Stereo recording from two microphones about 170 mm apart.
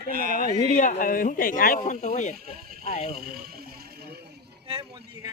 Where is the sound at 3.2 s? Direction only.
60° right (ahead or behind).